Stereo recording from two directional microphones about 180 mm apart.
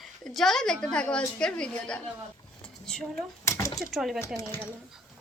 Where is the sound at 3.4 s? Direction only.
15° left (ahead or behind).